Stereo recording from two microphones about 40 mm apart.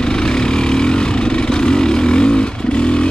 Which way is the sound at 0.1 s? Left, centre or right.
Centre.